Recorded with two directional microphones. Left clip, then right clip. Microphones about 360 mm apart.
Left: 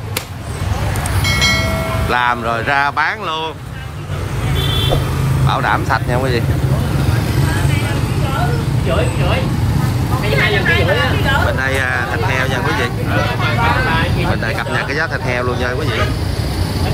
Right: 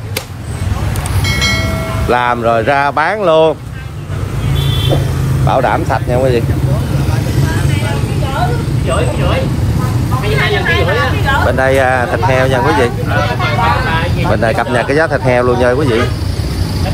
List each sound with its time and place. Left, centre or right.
1.2 s speech: centre
5.5 s speech: centre
11.2 s speech: centre
13.1 s vehicle: right
14.3 s speech: centre